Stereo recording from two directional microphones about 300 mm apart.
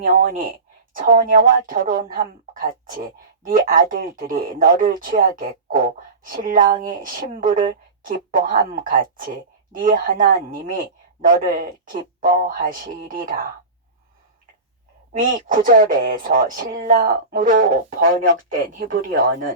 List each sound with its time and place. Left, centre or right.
0.0 s speech: right
15.2 s speech: right